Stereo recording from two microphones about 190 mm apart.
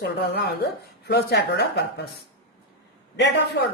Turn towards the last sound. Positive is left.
turn(degrees=60)  # may be behind; listen again after turning